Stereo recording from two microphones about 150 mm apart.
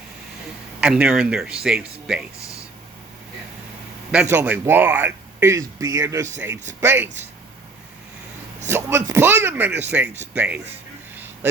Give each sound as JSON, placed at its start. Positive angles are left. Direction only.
{"t": 0.8, "sound": "speech", "side_deg": -5}
{"t": 4.1, "sound": "speech", "side_deg": -10}
{"t": 8.6, "sound": "speech", "side_deg": -15}